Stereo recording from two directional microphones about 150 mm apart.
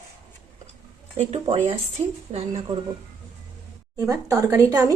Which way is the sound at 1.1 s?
40° right (ahead or behind).